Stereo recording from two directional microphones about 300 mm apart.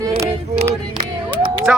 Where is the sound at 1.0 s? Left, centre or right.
Centre.